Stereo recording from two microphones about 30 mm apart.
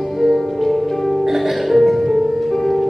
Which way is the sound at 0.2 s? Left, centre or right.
Centre.